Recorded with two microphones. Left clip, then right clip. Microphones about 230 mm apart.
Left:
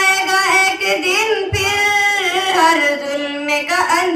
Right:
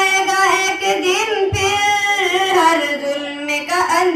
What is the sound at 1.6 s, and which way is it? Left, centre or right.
Female singing, left.